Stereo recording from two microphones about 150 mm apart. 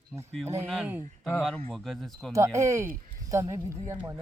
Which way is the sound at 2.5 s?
20° right (ahead or behind).